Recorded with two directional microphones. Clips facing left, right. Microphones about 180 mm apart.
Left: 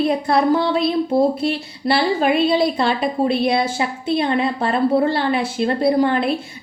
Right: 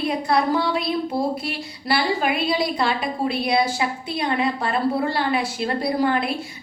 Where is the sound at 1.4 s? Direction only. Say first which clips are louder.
Left 7 dB; 25° left (ahead or behind).